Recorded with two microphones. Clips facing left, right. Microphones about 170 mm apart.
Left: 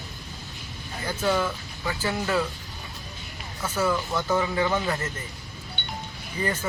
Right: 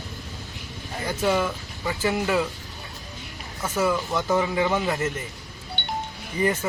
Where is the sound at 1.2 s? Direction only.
10° right (ahead or behind).